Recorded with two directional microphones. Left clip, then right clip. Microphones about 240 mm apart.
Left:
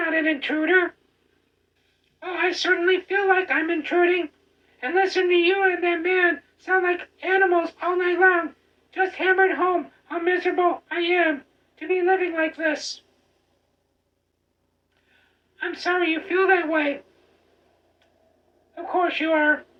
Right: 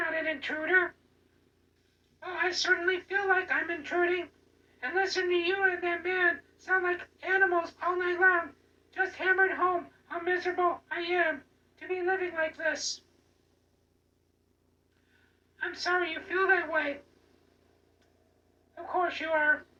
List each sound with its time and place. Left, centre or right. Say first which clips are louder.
0.0 s a sound: left 8 dB; left
2.1 s a man's voice: left 6 dB; left
15.1 s a man's voice: left 6 dB; left
18.7 s a man's voice: left 7 dB; left